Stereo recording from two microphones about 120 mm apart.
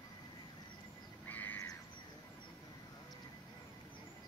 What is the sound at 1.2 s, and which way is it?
Bird, 15° left (ahead or behind).